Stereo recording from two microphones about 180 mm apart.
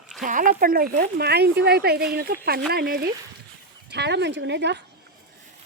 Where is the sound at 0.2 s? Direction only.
45° right (ahead or behind).